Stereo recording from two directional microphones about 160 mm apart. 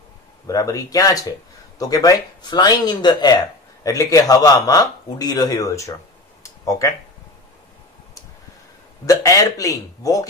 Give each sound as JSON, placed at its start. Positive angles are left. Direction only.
{"t": 0.5, "sound": "a man's voice", "side_deg": 20}
{"t": 6.4, "sound": "a sound", "side_deg": 20}
{"t": 9.0, "sound": "a man's voice", "side_deg": 20}